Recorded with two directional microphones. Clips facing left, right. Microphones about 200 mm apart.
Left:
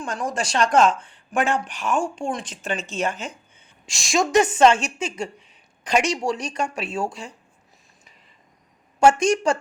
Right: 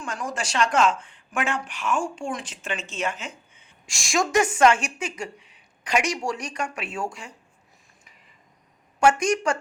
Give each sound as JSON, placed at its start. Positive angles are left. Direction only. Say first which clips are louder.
{"t": 0.0, "sound": "speech", "louder": "left 4 dB", "side_deg": 35}
{"t": 3.8, "sound": "a woman's voice", "louder": "left 3 dB", "side_deg": 20}
{"t": 9.0, "sound": "a woman's voice", "louder": "left 3 dB", "side_deg": 25}